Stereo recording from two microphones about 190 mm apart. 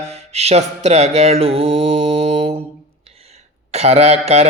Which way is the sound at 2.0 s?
70° right (ahead or behind).